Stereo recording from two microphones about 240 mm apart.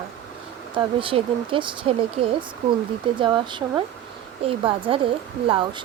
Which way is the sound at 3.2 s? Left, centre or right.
Centre.